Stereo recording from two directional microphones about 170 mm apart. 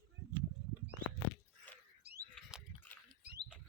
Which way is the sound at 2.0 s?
70° right (ahead or behind).